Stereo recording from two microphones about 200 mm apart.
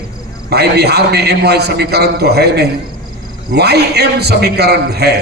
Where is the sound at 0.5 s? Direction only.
55° right (ahead or behind).